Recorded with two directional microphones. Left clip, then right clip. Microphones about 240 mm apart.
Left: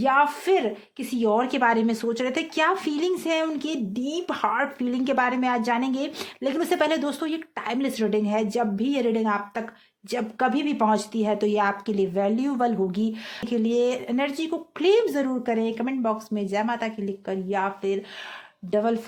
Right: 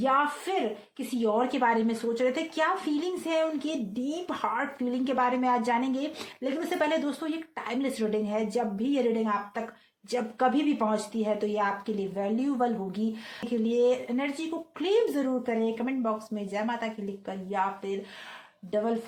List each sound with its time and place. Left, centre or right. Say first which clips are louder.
0.0 s a woman's voice: left 5 dB; left